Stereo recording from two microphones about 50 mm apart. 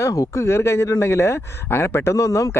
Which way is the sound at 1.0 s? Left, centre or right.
Left.